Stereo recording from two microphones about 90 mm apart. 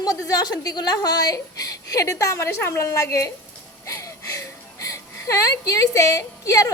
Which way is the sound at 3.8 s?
35° left (ahead or behind).